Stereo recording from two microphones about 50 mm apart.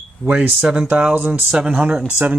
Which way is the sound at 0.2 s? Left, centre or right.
Right.